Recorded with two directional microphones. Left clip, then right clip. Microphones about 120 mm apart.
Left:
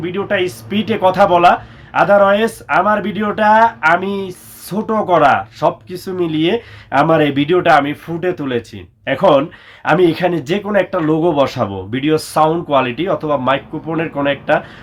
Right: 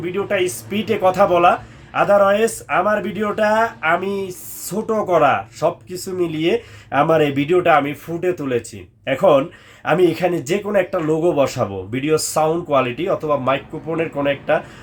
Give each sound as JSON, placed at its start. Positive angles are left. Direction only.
{"t": 0.0, "sound": "speech", "side_deg": -25}